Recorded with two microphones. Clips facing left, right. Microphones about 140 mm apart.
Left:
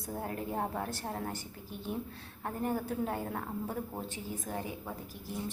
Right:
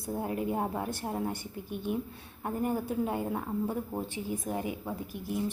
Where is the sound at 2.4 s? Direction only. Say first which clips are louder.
Right 3 dB; 15° right (ahead or behind).